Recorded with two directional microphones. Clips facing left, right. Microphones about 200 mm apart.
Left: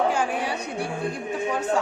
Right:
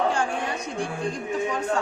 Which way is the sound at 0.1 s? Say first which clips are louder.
Left 1 dB; 10° left (ahead or behind).